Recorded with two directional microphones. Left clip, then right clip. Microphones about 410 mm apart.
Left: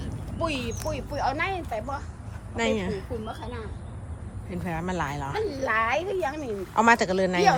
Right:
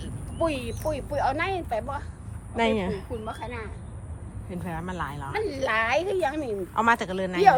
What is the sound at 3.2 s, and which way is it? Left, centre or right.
Speech, right.